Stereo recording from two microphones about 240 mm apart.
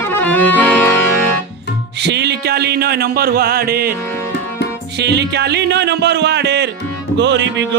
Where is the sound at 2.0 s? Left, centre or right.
Right.